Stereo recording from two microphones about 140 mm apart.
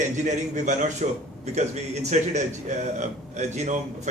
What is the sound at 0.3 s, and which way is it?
A man's voice, 60° right (ahead or behind).